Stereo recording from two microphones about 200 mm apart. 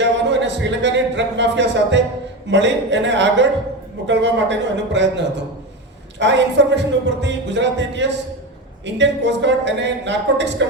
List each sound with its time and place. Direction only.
0.0 s speech: 60° right (ahead or behind)